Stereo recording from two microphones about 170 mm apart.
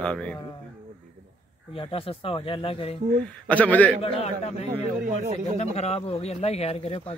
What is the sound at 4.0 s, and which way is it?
Speech, 35° left (ahead or behind).